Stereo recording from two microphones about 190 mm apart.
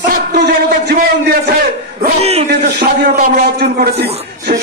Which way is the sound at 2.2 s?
30° right (ahead or behind).